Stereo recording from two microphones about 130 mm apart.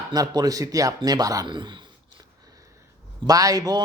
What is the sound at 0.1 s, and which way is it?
A man's voice, 30° right (ahead or behind).